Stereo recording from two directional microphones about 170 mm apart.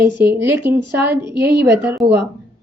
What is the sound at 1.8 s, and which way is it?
Speech, 15° right (ahead or behind).